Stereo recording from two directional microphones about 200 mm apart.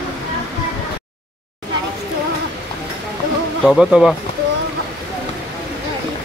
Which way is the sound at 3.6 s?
Centre (ahead or behind).